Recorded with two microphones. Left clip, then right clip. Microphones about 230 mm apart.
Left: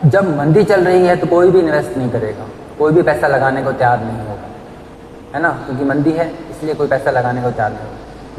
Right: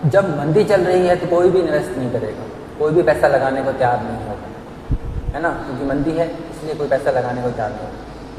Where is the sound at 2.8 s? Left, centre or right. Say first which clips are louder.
Left 2 dB; left.